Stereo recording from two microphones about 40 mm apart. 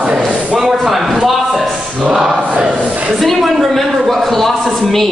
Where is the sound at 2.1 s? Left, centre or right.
Centre.